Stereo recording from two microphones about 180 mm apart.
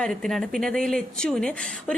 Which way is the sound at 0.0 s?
Centre (ahead or behind).